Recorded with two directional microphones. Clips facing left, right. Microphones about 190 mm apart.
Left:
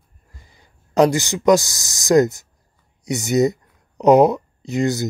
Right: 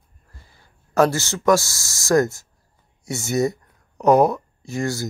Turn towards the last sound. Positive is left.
turn(degrees=20)  # may be behind; listen again after turning